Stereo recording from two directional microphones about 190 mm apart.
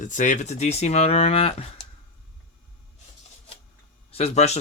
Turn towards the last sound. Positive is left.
turn(degrees=35)  # may be behind; listen again after turning